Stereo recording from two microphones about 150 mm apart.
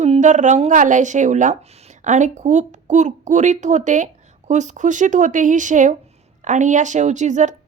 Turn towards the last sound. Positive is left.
turn(degrees=-55)  # may be behind; listen again after turning